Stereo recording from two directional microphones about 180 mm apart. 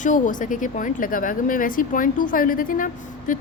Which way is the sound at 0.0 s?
45° left (ahead or behind).